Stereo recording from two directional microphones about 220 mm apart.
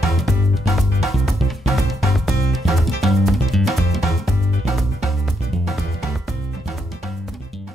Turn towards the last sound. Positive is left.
turn(degrees=0)  # may be behind; listen again after turning